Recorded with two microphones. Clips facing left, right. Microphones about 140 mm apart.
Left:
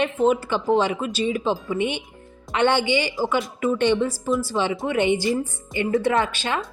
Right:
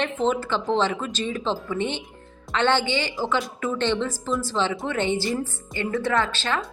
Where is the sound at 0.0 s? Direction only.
10° left (ahead or behind).